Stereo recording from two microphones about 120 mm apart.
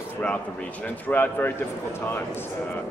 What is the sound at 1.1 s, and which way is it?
Speech, 15° left (ahead or behind).